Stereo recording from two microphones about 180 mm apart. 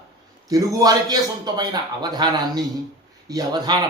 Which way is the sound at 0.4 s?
20° right (ahead or behind).